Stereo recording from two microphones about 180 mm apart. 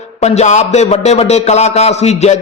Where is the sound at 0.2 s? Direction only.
40° left (ahead or behind).